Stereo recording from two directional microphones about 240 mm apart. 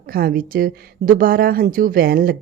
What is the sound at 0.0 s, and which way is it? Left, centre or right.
A woman's voice, right.